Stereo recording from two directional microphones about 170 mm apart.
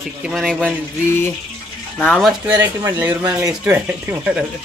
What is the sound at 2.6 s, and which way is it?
Speech, 10° right (ahead or behind).